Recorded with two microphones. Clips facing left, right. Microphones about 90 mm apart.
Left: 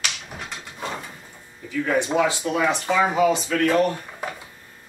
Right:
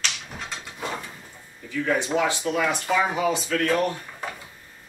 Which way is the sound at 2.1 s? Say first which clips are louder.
Left 2 dB; 15° left (ahead or behind).